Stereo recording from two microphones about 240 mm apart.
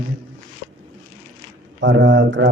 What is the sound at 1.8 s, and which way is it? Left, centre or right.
Speech, right.